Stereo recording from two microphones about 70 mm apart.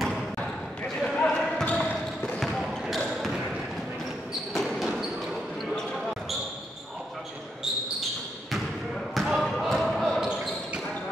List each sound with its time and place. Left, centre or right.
1.0 s basketball bounce: centre
2.4 s basketball bounce: centre
4.6 s basketball bounce: centre
9.1 s basketball bounce: centre
10.2 s basketball bounce: centre